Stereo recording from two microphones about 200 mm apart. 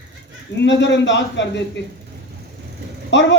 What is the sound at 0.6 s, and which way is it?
A man's voice, 60° left (ahead or behind).